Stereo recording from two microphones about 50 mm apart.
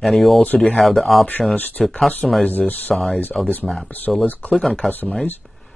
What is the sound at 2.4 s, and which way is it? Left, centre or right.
Speech, left.